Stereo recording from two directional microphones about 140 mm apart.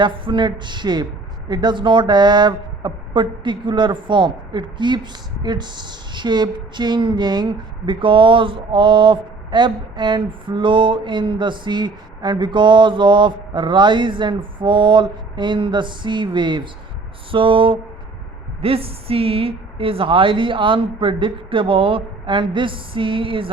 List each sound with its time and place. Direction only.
0.0 s speech: 35° right (ahead or behind)